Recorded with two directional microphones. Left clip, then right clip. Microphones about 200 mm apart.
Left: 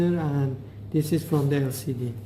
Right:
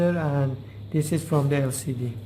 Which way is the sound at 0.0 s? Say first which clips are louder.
Right 2 dB; 30° right (ahead or behind).